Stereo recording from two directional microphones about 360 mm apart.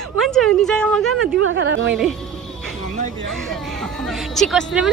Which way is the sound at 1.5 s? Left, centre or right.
Right.